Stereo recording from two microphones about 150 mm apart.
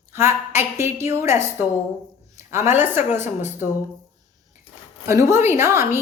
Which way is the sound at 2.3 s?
15° right (ahead or behind).